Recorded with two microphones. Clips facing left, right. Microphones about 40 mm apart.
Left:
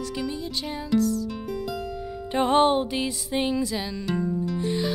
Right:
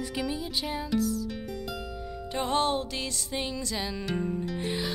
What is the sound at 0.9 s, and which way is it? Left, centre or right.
Music, centre.